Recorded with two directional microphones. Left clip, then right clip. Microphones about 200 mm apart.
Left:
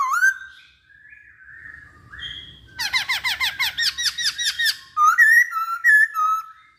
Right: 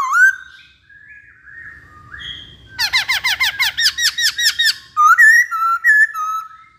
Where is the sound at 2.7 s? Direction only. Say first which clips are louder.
Right 6 dB; 15° right (ahead or behind).